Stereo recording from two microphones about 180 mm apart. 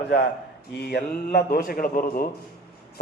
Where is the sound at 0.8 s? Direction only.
65° left (ahead or behind).